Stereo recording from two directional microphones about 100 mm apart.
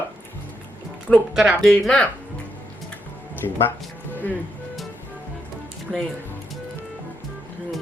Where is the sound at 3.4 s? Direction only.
40° left (ahead or behind).